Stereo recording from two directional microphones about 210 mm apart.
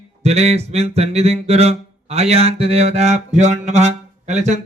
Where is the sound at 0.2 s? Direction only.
30° right (ahead or behind).